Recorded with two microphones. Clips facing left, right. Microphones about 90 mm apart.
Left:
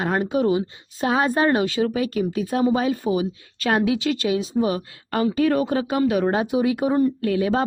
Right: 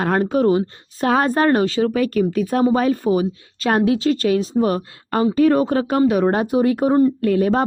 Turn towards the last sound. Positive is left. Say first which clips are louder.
# right 4 dB
turn(degrees=-40)  # may be behind; listen again after turning